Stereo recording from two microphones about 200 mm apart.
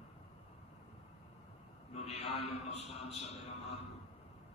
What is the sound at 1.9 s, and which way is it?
A man's voice, 30° left (ahead or behind).